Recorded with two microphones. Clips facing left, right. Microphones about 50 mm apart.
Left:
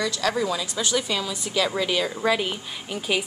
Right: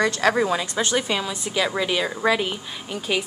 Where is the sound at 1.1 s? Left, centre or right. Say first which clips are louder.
Right 2 dB; right.